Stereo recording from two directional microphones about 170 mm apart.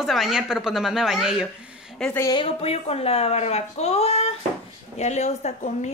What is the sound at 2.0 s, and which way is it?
Speech, 15° left (ahead or behind).